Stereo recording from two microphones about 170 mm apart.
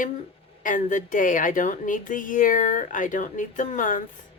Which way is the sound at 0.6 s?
50° left (ahead or behind).